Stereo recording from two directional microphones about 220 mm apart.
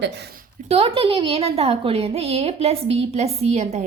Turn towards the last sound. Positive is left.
turn(degrees=-30)  # may be behind; listen again after turning